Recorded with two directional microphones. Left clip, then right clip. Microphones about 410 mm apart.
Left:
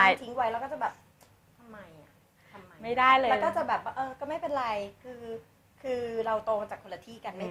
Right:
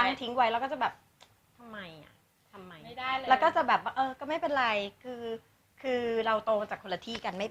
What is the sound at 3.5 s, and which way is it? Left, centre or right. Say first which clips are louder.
A woman's voice: right 3 dB; right.